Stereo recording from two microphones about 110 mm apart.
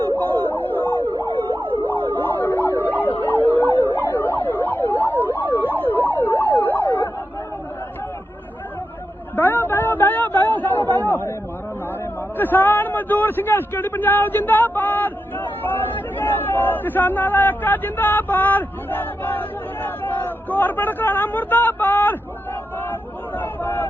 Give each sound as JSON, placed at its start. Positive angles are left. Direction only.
{"t": 0.2, "sound": "emergency vehicle", "side_deg": 15}
{"t": 1.5, "sound": "emergency vehicle", "side_deg": -15}
{"t": 1.8, "sound": "siren", "side_deg": 15}
{"t": 3.1, "sound": "emergency vehicle", "side_deg": 15}
{"t": 9.3, "sound": "a sound", "side_deg": 15}
{"t": 12.4, "sound": "a man's voice", "side_deg": 15}
{"t": 23.4, "sound": "a sound", "side_deg": 15}